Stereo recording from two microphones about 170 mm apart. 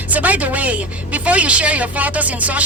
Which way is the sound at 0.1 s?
10° right (ahead or behind).